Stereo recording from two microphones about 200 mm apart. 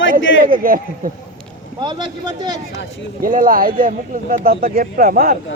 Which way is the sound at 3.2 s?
45° right (ahead or behind).